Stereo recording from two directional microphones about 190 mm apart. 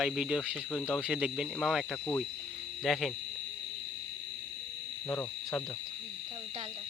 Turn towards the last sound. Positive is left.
turn(degrees=15)  # may be behind; listen again after turning